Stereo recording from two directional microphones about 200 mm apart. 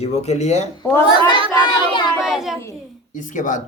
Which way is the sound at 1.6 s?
20° left (ahead or behind).